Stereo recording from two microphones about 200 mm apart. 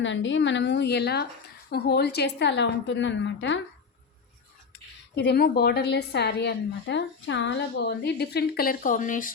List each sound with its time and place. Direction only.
0.0 s a woman's voice: 65° left (ahead or behind)
5.1 s a woman's voice: 60° left (ahead or behind); by 9.3 s 40° left (ahead or behind)